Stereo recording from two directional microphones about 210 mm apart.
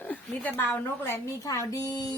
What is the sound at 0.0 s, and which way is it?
A woman's voice, 10° left (ahead or behind).